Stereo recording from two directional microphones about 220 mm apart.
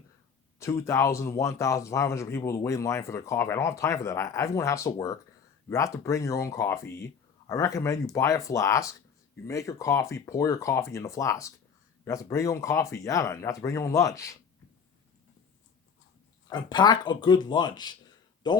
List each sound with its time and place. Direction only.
0.6 s speech: 15° left (ahead or behind)
16.5 s speech: 20° left (ahead or behind)